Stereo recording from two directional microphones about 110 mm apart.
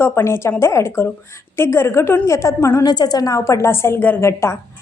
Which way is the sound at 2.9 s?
40° left (ahead or behind).